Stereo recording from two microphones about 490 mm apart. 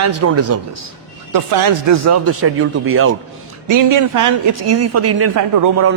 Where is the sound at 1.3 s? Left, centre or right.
Right.